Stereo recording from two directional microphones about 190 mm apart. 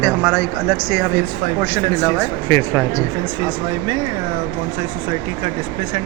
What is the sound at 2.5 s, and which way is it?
Speech, 10° left (ahead or behind).